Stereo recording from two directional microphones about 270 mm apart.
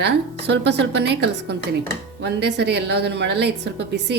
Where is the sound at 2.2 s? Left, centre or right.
Right.